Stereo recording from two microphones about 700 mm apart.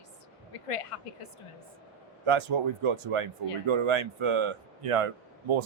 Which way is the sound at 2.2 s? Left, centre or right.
Right.